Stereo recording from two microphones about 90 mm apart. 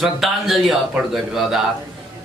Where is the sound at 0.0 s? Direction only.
5° right (ahead or behind).